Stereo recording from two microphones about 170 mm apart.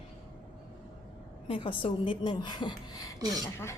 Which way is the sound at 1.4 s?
30° left (ahead or behind).